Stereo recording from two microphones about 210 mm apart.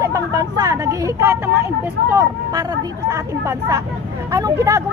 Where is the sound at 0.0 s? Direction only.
15° right (ahead or behind).